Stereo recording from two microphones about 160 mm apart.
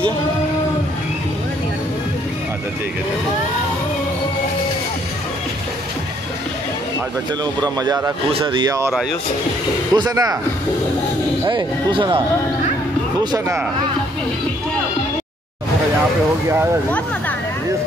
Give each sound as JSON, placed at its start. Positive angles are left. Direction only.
{"t": 7.6, "sound": "a man's voice", "side_deg": -25}
{"t": 9.9, "sound": "a man's voice", "side_deg": -25}
{"t": 11.4, "sound": "a man's voice", "side_deg": -30}